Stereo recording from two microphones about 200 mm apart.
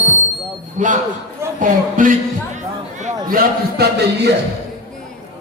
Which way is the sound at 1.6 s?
40° right (ahead or behind).